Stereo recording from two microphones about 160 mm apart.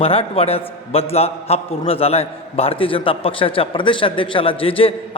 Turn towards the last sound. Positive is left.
turn(degrees=35)  # may be behind; listen again after turning